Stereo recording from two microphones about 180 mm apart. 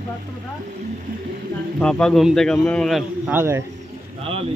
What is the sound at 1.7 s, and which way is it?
A man's voice, 5° left (ahead or behind).